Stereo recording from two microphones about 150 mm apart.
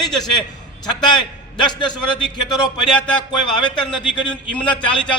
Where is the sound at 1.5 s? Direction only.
30° left (ahead or behind).